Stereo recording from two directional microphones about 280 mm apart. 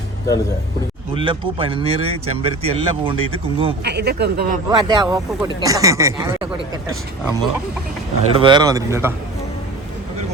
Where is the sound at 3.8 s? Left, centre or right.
Right.